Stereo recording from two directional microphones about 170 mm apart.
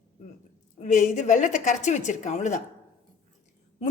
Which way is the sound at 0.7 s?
45° left (ahead or behind).